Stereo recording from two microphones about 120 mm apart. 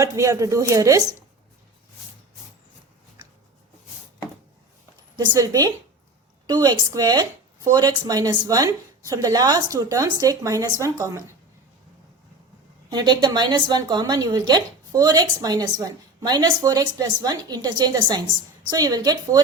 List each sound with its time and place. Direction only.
0.0 s a woman's voice: 25° right (ahead or behind)
5.1 s a woman's voice: 35° right (ahead or behind)
12.9 s a woman's voice: 35° right (ahead or behind)